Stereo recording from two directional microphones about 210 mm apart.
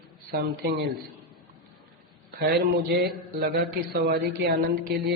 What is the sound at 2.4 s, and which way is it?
A man's voice, 50° right (ahead or behind).